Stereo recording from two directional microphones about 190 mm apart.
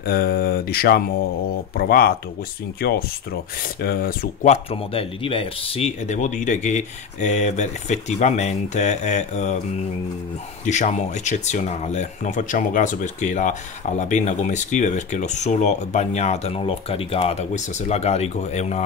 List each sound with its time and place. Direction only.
0.0 s mantra: 50° left (ahead or behind)
4.5 s speech: 30° left (ahead or behind)
10.6 s speech: 40° left (ahead or behind)